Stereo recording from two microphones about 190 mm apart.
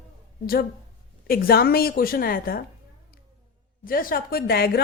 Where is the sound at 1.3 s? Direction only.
50° left (ahead or behind).